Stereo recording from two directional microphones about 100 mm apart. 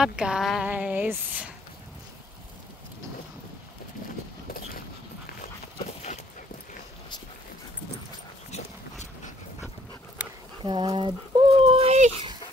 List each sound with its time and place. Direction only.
0.0 s speech: 10° right (ahead or behind)
0.7 s speech: 15° right (ahead or behind)
10.6 s speech: 55° right (ahead or behind)
11.6 s a sound: 85° right